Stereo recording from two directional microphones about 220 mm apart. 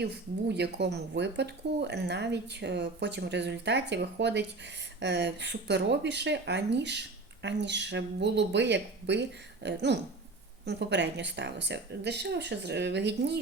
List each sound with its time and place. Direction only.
0.0 s speech: 50° right (ahead or behind)